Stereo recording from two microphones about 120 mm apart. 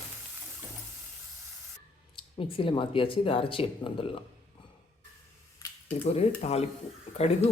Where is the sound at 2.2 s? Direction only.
50° left (ahead or behind).